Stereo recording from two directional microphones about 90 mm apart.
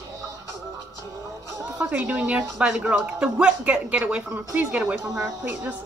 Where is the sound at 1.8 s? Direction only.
15° right (ahead or behind).